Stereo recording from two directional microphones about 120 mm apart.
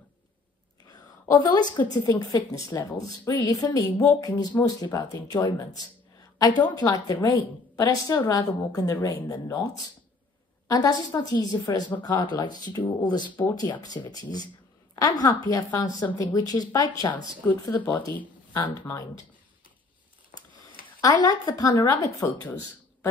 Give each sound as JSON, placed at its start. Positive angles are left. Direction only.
{"t": 1.5, "sound": "a woman's voice", "side_deg": 35}
{"t": 10.7, "sound": "a woman's voice", "side_deg": 30}
{"t": 21.0, "sound": "a woman's voice", "side_deg": 35}